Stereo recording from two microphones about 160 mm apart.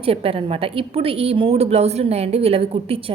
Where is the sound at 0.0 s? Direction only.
35° right (ahead or behind).